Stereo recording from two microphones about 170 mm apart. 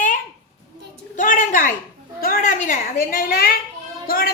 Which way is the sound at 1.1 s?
50° left (ahead or behind).